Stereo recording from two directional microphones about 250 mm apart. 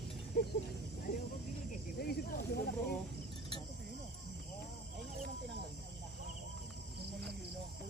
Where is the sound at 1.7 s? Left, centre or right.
Left.